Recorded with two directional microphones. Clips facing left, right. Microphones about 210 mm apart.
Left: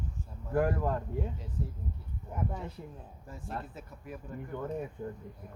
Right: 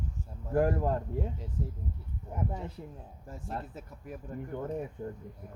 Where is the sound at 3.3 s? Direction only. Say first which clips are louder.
Right 1 dB; 45° right (ahead or behind).